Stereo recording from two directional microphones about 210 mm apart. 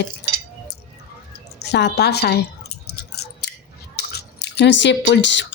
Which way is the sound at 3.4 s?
50° left (ahead or behind).